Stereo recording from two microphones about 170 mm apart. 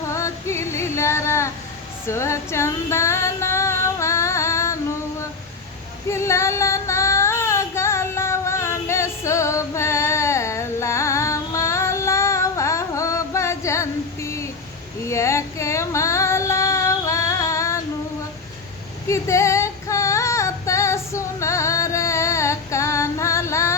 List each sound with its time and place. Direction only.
0.1 s female singing: 15° left (ahead or behind)
6.1 s female singing: 15° left (ahead or behind)
19.0 s female singing: 15° left (ahead or behind)